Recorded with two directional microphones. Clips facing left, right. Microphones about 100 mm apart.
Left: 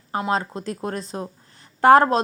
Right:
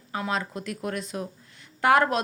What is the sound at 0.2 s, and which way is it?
Speech, 30° left (ahead or behind).